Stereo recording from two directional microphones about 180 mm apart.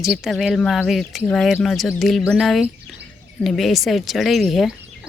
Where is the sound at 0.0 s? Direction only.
Centre (ahead or behind).